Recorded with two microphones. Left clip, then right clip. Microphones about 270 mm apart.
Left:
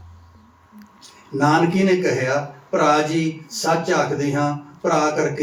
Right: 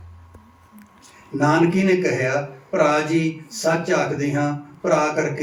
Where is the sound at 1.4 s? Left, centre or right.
Centre.